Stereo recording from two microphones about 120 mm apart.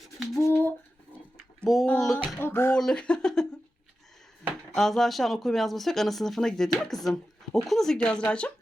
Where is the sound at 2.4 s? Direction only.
20° left (ahead or behind).